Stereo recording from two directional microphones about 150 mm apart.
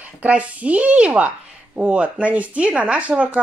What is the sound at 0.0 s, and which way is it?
Speech, 10° right (ahead or behind).